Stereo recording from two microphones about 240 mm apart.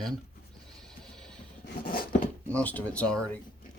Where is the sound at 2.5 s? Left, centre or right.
Centre.